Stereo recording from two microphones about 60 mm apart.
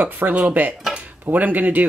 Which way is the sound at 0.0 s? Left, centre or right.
Right.